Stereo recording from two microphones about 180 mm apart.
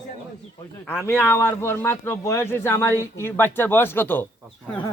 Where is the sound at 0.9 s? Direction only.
15° left (ahead or behind).